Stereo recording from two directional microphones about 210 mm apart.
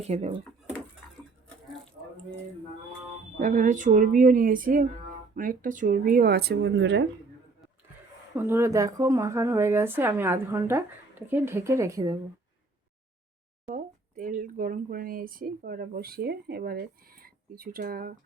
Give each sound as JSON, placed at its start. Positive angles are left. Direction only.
{"t": 0.0, "sound": "speech", "side_deg": -30}
{"t": 3.3, "sound": "speech", "side_deg": -40}
{"t": 8.4, "sound": "speech", "side_deg": -10}
{"t": 13.7, "sound": "speech", "side_deg": -40}